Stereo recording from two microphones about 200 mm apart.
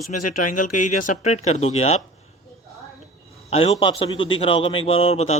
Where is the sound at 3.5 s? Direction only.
30° left (ahead or behind).